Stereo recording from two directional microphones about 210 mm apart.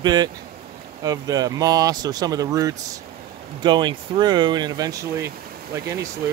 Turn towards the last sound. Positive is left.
turn(degrees=-15)  # may be behind; listen again after turning